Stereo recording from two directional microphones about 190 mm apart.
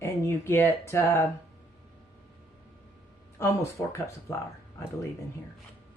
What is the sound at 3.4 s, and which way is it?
Speech, 15° left (ahead or behind).